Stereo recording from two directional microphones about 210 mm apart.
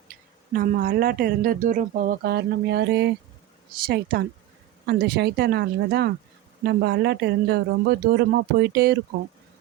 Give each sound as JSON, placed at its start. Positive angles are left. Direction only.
{"t": 0.1, "sound": "speech", "side_deg": -40}